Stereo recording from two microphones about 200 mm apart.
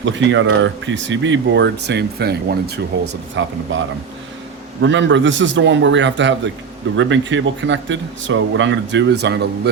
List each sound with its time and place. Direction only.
0.0 s speech: 65° right (ahead or behind)
4.8 s speech: 70° right (ahead or behind)